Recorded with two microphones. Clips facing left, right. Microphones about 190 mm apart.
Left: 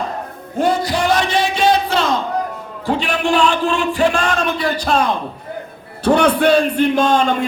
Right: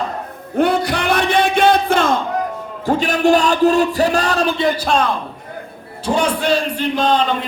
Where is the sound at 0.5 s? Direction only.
60° right (ahead or behind); by 4.7 s 30° right (ahead or behind).